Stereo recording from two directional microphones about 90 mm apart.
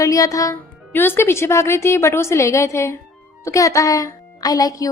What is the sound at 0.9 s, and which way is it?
A woman's voice, 25° left (ahead or behind).